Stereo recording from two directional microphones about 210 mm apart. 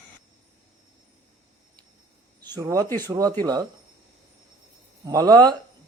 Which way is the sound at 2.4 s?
15° right (ahead or behind).